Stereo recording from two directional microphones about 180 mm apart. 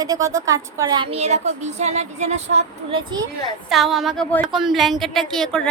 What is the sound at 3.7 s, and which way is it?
A woman's voice, centre (ahead or behind).